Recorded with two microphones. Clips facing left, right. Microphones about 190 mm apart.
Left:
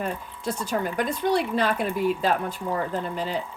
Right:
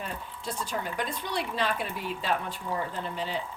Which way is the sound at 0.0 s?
45° left (ahead or behind).